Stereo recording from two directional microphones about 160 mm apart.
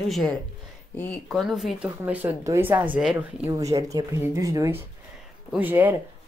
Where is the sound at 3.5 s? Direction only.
20° right (ahead or behind).